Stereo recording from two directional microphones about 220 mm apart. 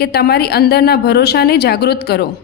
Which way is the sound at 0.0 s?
45° left (ahead or behind).